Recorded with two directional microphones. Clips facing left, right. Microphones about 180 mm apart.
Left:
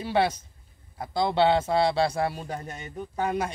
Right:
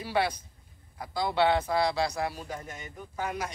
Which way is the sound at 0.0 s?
25° left (ahead or behind).